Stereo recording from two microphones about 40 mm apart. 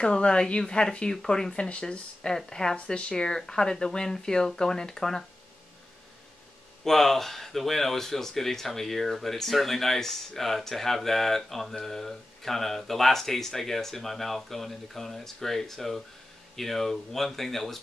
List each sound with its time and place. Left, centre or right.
0.0 s speech: left
6.8 s speech: centre